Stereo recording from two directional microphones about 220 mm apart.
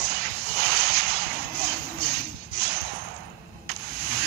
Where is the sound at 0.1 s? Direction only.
45° right (ahead or behind).